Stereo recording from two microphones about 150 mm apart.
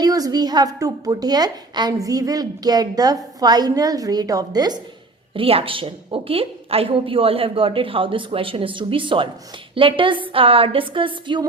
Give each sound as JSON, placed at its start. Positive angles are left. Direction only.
{"t": 0.0, "sound": "a woman's voice", "side_deg": -25}
{"t": 5.3, "sound": "a woman's voice", "side_deg": -40}